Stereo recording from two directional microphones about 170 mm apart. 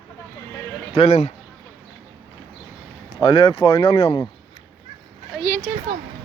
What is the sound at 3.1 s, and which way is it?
Speech, 30° left (ahead or behind).